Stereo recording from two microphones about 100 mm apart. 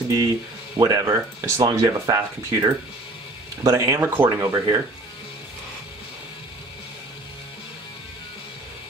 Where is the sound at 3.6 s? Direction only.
30° right (ahead or behind).